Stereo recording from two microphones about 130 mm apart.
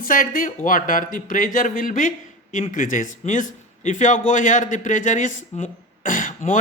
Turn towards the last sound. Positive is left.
turn(degrees=85)